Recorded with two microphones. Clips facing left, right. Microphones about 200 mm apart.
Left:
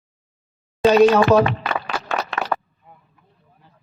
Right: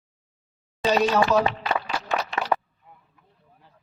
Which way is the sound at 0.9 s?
60° left (ahead or behind).